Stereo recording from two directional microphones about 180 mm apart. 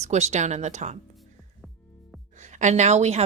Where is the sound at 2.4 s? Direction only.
40° right (ahead or behind).